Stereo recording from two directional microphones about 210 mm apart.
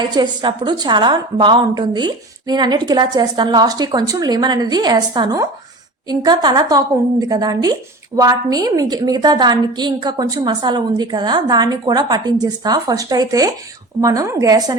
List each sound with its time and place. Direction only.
0.1 s a woman's voice: 20° right (ahead or behind)